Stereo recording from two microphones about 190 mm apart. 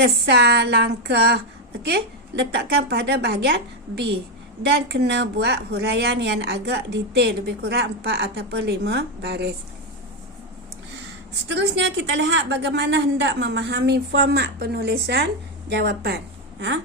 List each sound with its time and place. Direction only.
0.0 s speech: 60° right (ahead or behind)
11.4 s a woman's voice: 70° right (ahead or behind)